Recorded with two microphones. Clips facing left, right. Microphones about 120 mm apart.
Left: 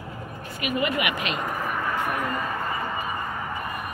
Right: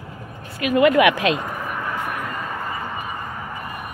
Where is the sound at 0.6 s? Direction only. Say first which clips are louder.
Right 11 dB; 85° right.